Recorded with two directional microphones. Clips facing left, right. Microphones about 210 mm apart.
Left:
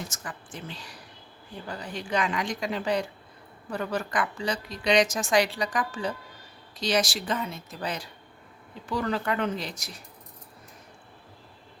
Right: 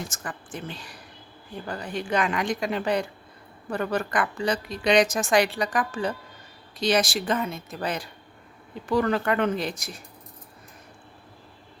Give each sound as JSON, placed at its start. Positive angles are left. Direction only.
{"t": 0.1, "sound": "a woman's voice", "side_deg": -55}